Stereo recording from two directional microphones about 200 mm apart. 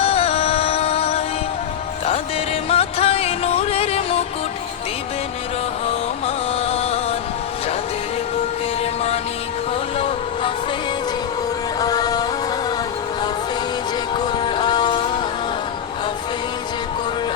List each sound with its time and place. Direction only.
0.0 s music: 30° left (ahead or behind)
2.6 s music: 30° left (ahead or behind)
5.9 s music: 30° left (ahead or behind)
11.8 s music: 20° left (ahead or behind)
14.3 s music: 25° left (ahead or behind)